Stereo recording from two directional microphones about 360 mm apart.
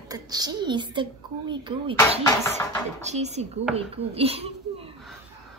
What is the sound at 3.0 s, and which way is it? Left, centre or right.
Speech, centre.